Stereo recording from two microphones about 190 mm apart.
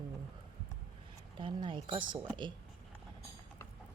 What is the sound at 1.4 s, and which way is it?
Speech, 25° right (ahead or behind).